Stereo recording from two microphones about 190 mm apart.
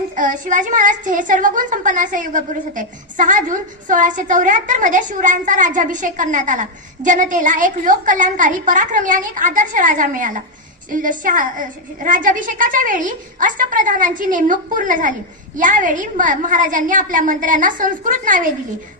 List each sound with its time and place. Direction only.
0.2 s a woman's voice: 45° right (ahead or behind)